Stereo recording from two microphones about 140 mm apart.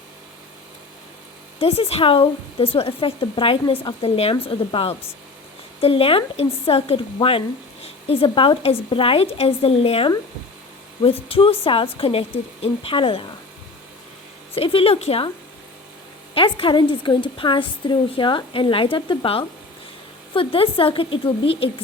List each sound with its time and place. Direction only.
1.5 s a woman's voice: 45° left (ahead or behind)
14.5 s speech: 40° left (ahead or behind)
16.3 s a woman's voice: 40° left (ahead or behind)